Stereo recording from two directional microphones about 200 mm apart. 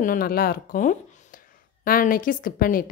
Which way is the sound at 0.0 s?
45° left (ahead or behind).